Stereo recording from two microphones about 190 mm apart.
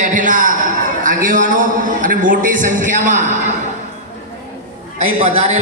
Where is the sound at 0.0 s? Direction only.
45° right (ahead or behind).